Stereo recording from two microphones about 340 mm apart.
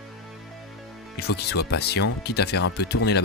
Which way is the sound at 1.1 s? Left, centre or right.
Left.